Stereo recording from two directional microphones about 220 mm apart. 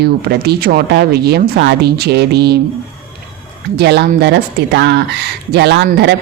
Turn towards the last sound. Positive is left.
turn(degrees=-50)  # may be behind; listen again after turning